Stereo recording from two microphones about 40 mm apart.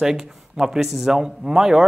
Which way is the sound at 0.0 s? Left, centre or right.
Centre.